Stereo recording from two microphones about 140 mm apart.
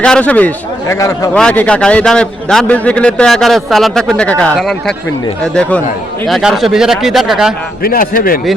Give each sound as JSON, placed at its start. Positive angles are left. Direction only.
{"t": 0.0, "sound": "speech", "side_deg": 10}
{"t": 0.9, "sound": "a man's voice", "side_deg": 25}
{"t": 1.3, "sound": "a man's voice", "side_deg": 10}
{"t": 6.2, "sound": "a man's voice", "side_deg": 0}
{"t": 7.8, "sound": "a man's voice", "side_deg": 85}